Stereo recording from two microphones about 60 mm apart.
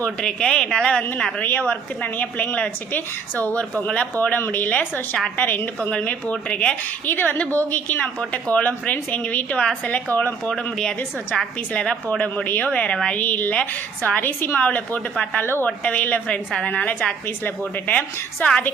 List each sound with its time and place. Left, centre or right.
0.2 s speech: centre
1.4 s a woman's voice: left; by 6.7 s centre
7.0 s a woman's voice: left
10.5 s speech: centre
12.5 s a woman's voice: left
14.2 s a woman's voice: left
15.1 s speech: centre
15.4 s speech: left
15.6 s a woman's voice: left
17.2 s speech: left